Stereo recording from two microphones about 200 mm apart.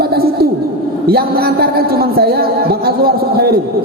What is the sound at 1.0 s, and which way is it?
A man's voice, 50° right (ahead or behind).